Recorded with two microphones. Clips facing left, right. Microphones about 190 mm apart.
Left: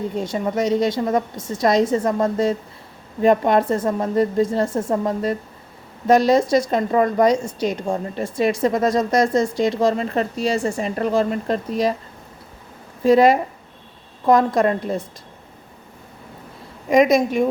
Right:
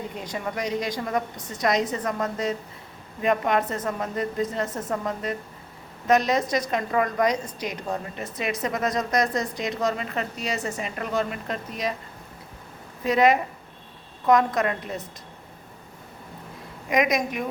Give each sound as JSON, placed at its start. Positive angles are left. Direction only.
{"t": 0.2, "sound": "a woman's voice", "side_deg": 25}
{"t": 13.1, "sound": "a woman's voice", "side_deg": 30}
{"t": 16.9, "sound": "a woman's voice", "side_deg": 30}